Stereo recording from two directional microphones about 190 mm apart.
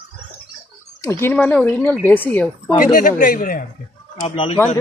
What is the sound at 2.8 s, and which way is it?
Speech, 45° left (ahead or behind).